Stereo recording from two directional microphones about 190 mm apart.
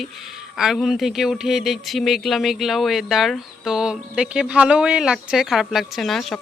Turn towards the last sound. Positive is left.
turn(degrees=0)  # may be behind; listen again after turning